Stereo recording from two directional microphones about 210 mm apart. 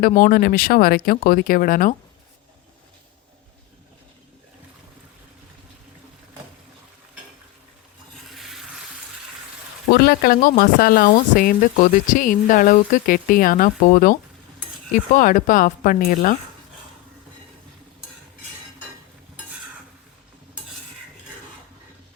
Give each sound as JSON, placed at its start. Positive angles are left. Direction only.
{"t": 0.0, "sound": "speech", "side_deg": 40}
{"t": 8.4, "sound": "water", "side_deg": 0}
{"t": 9.9, "sound": "speech", "side_deg": 45}